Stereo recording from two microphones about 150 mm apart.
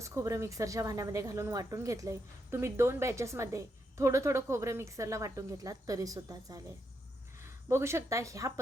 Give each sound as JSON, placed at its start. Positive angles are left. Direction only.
{"t": 0.0, "sound": "speech", "side_deg": -20}